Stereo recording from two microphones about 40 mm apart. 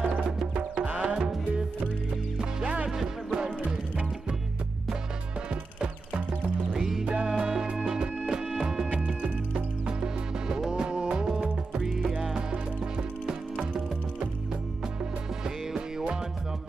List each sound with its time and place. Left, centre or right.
0.7 s music: right
1.0 s music: centre
2.9 s music: centre
5.5 s music: right
6.7 s music: centre
7.1 s music: right